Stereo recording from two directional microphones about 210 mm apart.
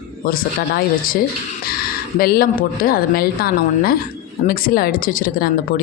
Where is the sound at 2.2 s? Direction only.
45° left (ahead or behind).